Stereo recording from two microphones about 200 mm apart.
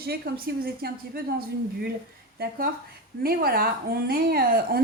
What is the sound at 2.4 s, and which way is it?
A woman's voice, 45° right (ahead or behind).